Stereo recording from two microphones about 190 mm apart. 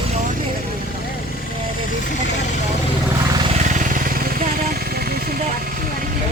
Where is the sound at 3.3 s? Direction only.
30° right (ahead or behind); by 6.1 s 50° right (ahead or behind).